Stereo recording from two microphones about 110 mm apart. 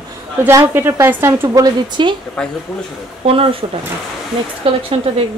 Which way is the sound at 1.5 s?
40° right (ahead or behind).